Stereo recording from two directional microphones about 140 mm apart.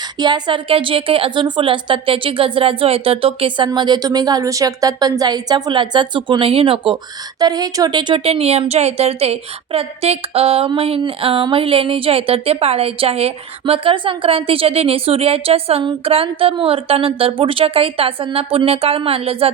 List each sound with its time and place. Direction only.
0.2 s speech: 30° right (ahead or behind)